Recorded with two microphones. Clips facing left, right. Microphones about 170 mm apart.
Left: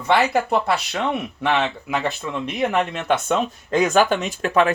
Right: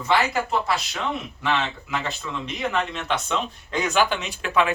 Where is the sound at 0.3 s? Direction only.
65° left (ahead or behind).